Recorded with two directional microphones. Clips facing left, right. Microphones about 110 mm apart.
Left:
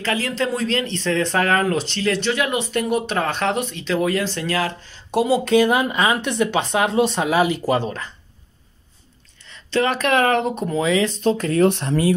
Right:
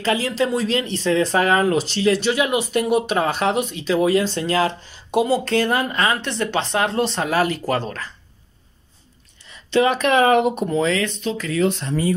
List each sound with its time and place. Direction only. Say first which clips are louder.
0.0 s speech: right 2 dB; 15° right (ahead or behind)
0.4 s speech: right 1 dB; 5° right (ahead or behind)
5.1 s speech: left 2 dB; 10° left (ahead or behind)
9.5 s speech: right 3 dB; 5° right (ahead or behind)
10.7 s speech: even; 10° left (ahead or behind)
11.1 s speech: left 4 dB; 45° left (ahead or behind); by 12.1 s 65° left (ahead or behind)